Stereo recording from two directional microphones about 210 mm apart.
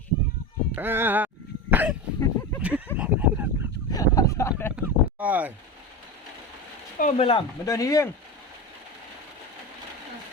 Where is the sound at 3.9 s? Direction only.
15° left (ahead or behind).